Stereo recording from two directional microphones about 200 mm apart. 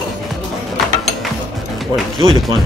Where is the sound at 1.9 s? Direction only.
20° right (ahead or behind).